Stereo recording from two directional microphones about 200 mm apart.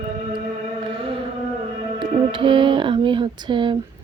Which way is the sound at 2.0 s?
25° right (ahead or behind).